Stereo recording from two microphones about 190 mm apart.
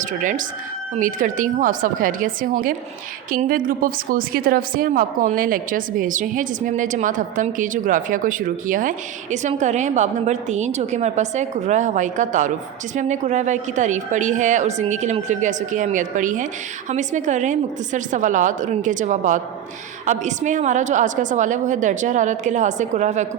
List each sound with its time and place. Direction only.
0.0 s a woman's voice: 45° right (ahead or behind)